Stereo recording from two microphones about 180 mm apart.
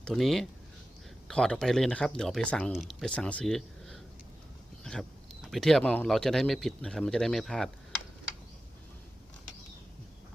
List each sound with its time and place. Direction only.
0.0 s speech: centre (ahead or behind)